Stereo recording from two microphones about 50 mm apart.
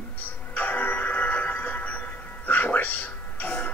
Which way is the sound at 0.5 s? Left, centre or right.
Left.